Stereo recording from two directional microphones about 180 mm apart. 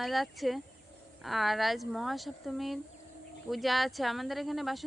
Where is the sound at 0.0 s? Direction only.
Centre (ahead or behind).